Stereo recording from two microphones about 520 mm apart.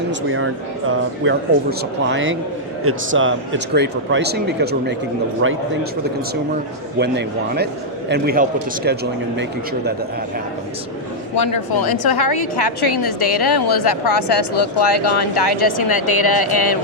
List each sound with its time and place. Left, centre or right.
0.1 s speech: right
7.0 s speech: centre
11.3 s speech: left